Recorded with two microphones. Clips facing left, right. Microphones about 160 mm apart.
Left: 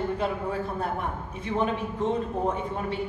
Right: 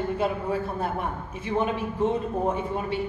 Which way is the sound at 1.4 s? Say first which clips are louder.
Right 1 dB; 5° right (ahead or behind).